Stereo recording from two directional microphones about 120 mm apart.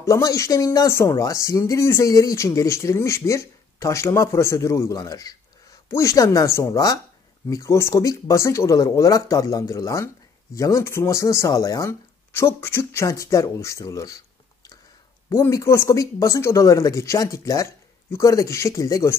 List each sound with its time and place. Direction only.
0.0 s speech: 25° left (ahead or behind)
15.2 s speech: 25° left (ahead or behind)